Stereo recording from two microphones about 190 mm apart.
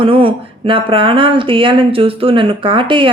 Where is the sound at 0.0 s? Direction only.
30° right (ahead or behind).